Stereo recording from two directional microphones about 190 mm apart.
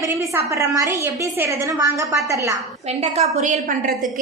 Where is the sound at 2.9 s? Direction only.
35° right (ahead or behind).